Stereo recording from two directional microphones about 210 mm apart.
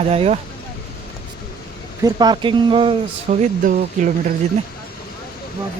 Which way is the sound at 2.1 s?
20° right (ahead or behind).